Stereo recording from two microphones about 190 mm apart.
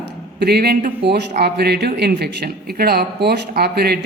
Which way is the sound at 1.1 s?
65° right (ahead or behind).